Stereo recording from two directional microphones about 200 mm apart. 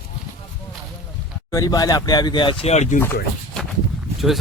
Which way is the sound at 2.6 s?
35° left (ahead or behind).